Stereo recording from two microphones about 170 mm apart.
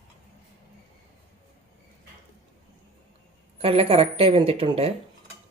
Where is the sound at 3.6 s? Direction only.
35° right (ahead or behind).